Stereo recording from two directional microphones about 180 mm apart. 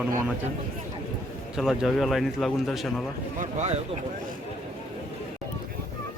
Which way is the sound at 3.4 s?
40° right (ahead or behind).